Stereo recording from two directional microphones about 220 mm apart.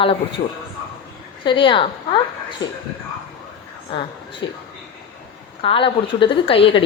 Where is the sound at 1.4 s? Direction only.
20° left (ahead or behind).